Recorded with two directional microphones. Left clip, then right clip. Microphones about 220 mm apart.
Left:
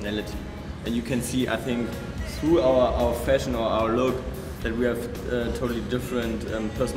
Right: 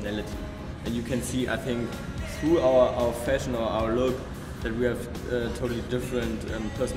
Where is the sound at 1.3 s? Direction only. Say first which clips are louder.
Left 3 dB; 10° left (ahead or behind).